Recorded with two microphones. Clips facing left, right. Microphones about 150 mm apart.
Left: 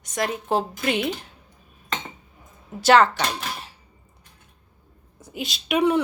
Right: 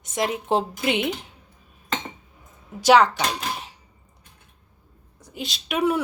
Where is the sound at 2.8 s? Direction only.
10° right (ahead or behind).